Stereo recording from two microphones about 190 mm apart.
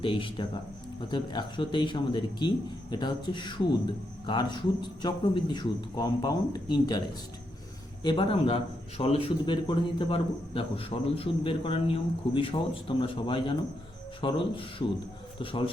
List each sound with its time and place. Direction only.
0.0 s a man's voice: 25° left (ahead or behind)
8.0 s a man's voice: 25° left (ahead or behind)